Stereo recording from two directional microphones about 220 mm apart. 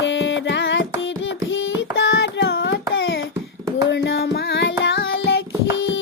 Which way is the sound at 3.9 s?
50° left (ahead or behind).